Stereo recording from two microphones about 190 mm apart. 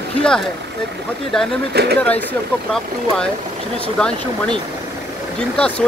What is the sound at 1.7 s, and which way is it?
Speech, 60° right (ahead or behind).